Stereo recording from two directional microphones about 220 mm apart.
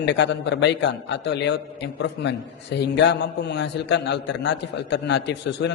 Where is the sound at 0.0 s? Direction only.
50° left (ahead or behind).